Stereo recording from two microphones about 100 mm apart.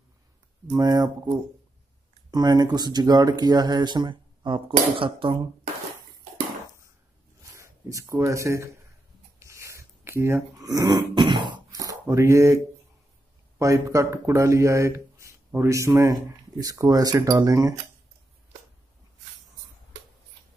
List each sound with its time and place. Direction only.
0.7 s speech: 40° right (ahead or behind)
2.3 s speech: 40° right (ahead or behind); by 5.4 s 60° right (ahead or behind)
7.5 s speech: 30° right (ahead or behind)
9.4 s a sound: 30° right (ahead or behind)
10.6 s grunt: 40° right (ahead or behind)
11.8 s speech: 35° right (ahead or behind)